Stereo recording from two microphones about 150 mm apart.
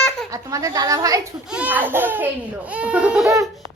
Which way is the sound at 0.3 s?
20° right (ahead or behind).